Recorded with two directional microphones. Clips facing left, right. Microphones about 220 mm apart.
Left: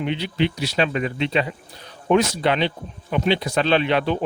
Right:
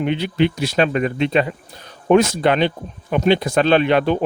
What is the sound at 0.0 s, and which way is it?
A man's voice, 50° right (ahead or behind).